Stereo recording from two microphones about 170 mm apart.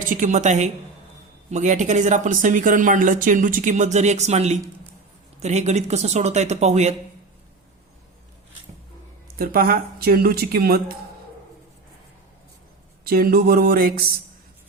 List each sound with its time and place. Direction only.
0.1 s speech: 45° right (ahead or behind)
9.2 s speech: 60° right (ahead or behind)
13.1 s speech: 60° right (ahead or behind)